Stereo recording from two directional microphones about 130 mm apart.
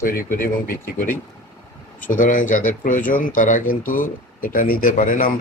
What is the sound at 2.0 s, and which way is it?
Speech, 90° left.